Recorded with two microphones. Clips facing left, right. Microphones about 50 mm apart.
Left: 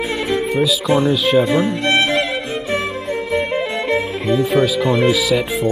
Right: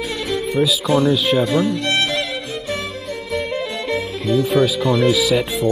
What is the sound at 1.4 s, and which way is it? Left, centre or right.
Speech, left.